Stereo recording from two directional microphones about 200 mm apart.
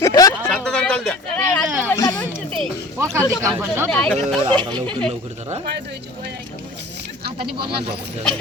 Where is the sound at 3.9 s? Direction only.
5° left (ahead or behind).